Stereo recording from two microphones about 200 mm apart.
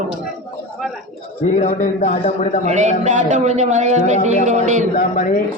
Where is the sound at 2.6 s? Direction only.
35° right (ahead or behind).